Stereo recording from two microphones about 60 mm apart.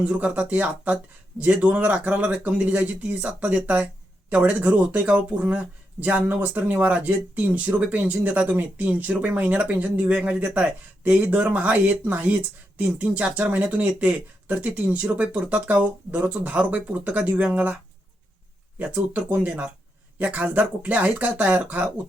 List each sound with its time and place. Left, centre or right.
0.0 s speech: right
18.8 s speech: right